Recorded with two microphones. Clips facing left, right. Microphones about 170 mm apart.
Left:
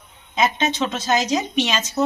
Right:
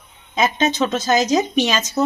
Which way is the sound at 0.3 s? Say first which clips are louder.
Right 2 dB; 40° right (ahead or behind).